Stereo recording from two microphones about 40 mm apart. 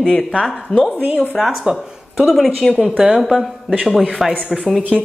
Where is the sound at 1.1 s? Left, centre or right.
Centre.